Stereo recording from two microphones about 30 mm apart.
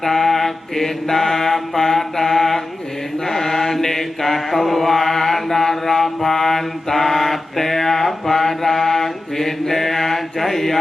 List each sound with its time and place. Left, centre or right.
0.0 s mantra: centre